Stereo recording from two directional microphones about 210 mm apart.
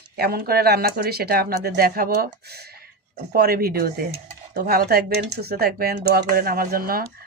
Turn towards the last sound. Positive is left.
turn(degrees=-45)  # may be behind; listen again after turning